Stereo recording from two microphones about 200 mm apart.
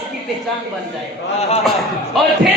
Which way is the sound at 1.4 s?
30° left (ahead or behind).